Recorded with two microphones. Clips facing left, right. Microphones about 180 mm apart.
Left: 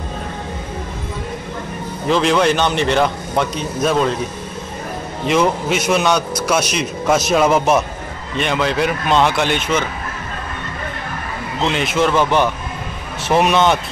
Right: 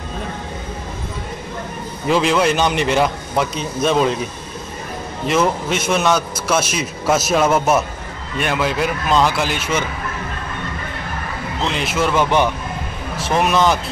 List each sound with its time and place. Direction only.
2.0 s a man's voice: 5° right (ahead or behind)
5.2 s a man's voice: centre (ahead or behind)
11.7 s a man's voice: centre (ahead or behind)
13.3 s a man's voice: centre (ahead or behind)